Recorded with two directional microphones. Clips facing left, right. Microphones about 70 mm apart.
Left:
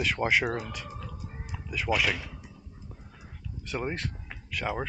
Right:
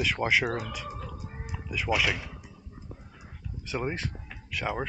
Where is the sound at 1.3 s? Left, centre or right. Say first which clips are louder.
Right 2 dB; centre.